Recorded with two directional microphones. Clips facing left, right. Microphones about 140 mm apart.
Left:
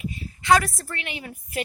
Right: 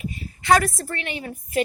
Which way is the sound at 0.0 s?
55° right (ahead or behind).